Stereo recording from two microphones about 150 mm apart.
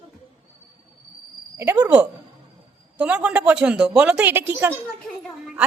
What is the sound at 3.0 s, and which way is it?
A woman's voice, 5° right (ahead or behind).